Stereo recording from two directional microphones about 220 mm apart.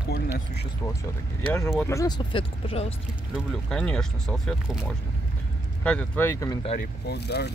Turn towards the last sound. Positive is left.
turn(degrees=50)  # may be behind; listen again after turning